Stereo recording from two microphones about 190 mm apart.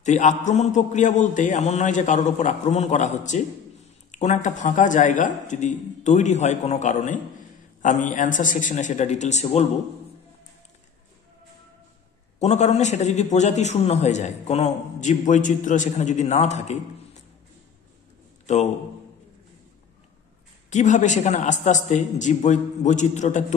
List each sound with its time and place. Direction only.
0.0 s a man's voice: 40° left (ahead or behind)
12.4 s a man's voice: 35° left (ahead or behind)
18.5 s a man's voice: 35° left (ahead or behind)
20.7 s a man's voice: 40° left (ahead or behind)